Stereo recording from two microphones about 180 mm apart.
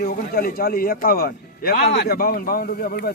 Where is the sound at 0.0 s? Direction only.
60° left (ahead or behind).